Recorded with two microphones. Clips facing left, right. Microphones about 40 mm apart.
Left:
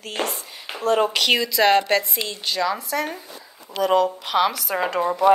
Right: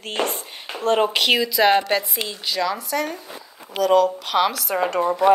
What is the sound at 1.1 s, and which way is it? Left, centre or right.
A woman's voice, centre.